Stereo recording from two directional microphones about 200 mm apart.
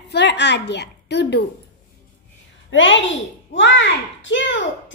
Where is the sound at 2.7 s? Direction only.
70° left (ahead or behind).